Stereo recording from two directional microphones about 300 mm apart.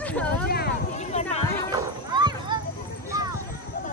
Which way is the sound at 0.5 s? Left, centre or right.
Left.